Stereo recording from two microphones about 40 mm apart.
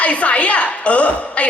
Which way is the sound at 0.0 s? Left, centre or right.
Left.